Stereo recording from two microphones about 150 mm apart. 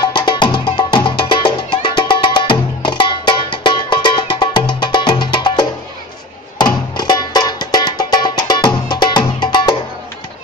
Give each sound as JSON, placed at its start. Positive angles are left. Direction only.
{"t": 0.0, "sound": "music", "side_deg": 30}